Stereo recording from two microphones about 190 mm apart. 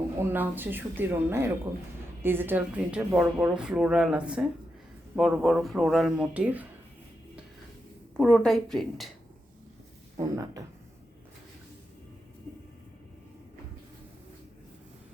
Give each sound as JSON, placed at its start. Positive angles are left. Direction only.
{"t": 0.2, "sound": "speech", "side_deg": -10}
{"t": 8.1, "sound": "speech", "side_deg": 0}
{"t": 10.2, "sound": "speech", "side_deg": -20}